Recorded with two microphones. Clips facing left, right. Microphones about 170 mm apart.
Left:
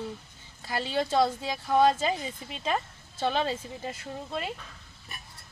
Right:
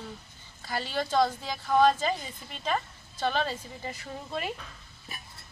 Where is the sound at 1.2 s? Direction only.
5° left (ahead or behind).